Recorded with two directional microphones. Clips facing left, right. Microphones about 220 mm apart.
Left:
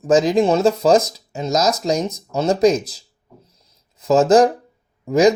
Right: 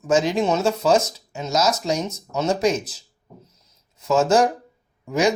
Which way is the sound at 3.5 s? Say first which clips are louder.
Left 2 dB; 30° left (ahead or behind).